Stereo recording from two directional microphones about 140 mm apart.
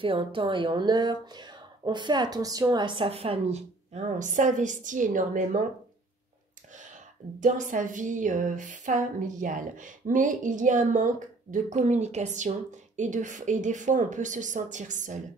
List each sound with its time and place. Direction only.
0.0 s a woman's voice: 40° right (ahead or behind); by 5.7 s 65° right (ahead or behind)
7.3 s speech: 65° right (ahead or behind)